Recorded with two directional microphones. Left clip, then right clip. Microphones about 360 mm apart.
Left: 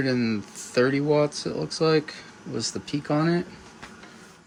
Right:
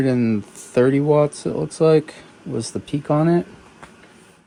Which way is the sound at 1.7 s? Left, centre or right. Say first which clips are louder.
Right 7 dB; centre.